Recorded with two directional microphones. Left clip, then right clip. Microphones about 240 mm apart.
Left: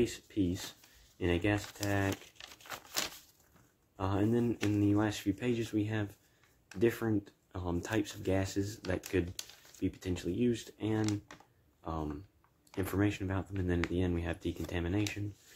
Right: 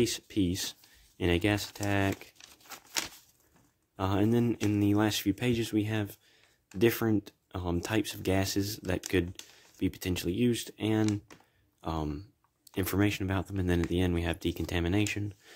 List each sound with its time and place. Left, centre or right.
0.0 s speech: right
2.3 s crumpling: centre
3.9 s speech: right